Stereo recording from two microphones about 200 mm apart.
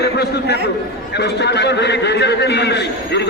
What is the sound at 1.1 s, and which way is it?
A man's voice, 55° left (ahead or behind).